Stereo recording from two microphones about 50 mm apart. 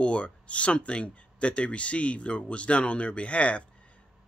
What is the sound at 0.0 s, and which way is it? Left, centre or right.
Speech, left.